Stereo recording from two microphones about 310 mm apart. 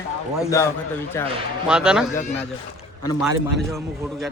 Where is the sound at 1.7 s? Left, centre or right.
Centre.